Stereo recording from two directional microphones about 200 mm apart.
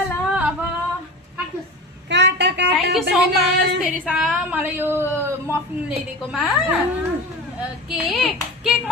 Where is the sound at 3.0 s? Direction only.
Centre (ahead or behind).